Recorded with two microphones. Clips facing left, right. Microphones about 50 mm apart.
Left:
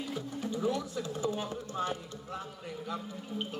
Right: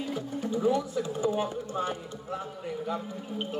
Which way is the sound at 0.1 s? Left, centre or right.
Centre.